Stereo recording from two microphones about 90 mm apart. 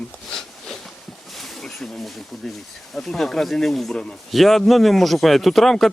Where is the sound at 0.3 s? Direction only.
5° left (ahead or behind).